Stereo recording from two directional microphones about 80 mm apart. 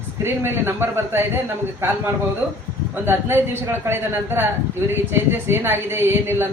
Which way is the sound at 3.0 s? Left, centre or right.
Right.